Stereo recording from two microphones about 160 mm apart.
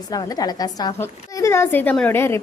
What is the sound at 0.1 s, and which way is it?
A woman's voice, 25° left (ahead or behind).